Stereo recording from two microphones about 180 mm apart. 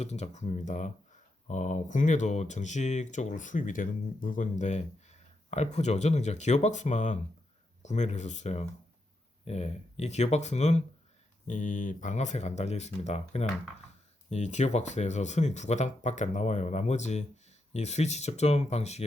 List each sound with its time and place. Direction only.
0.0 s speech: 40° left (ahead or behind)